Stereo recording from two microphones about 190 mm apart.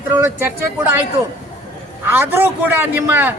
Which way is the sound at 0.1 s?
10° right (ahead or behind).